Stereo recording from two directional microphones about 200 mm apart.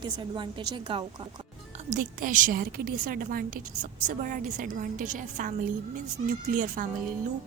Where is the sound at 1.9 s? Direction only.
40° right (ahead or behind).